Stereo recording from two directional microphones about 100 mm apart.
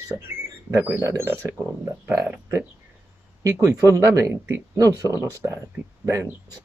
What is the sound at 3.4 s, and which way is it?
Speech, 30° right (ahead or behind).